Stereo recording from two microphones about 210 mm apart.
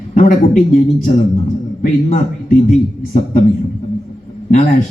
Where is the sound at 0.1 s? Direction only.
40° left (ahead or behind).